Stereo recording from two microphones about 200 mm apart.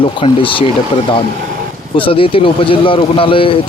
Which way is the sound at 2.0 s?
25° left (ahead or behind).